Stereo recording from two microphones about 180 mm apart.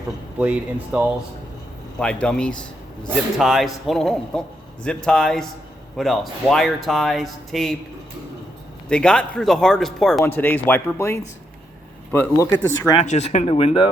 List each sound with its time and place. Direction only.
0.3 s speech: 5° right (ahead or behind)
2.0 s speech: 5° left (ahead or behind)
8.9 s speech: 5° left (ahead or behind)
13.0 s speech: 35° left (ahead or behind)